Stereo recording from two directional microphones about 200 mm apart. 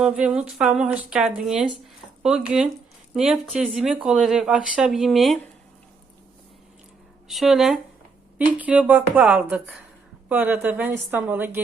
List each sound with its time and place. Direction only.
0.0 s speech: 5° right (ahead or behind)
7.3 s a woman's voice: centre (ahead or behind)